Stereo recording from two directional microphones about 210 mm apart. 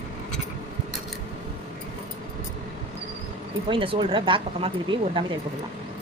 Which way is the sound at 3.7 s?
25° right (ahead or behind).